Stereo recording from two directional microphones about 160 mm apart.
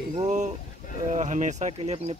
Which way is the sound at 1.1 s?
50° right (ahead or behind).